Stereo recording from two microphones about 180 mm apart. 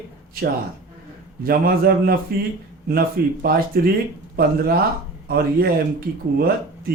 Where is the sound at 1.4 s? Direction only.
55° right (ahead or behind).